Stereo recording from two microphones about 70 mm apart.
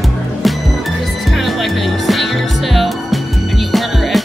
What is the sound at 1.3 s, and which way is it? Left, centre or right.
Music, centre.